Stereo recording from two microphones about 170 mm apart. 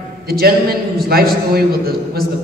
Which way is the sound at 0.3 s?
65° right (ahead or behind).